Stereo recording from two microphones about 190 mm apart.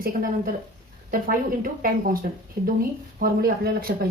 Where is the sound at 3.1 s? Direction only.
50° right (ahead or behind).